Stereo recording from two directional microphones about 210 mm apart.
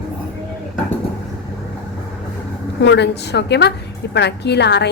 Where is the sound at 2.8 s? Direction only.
55° left (ahead or behind).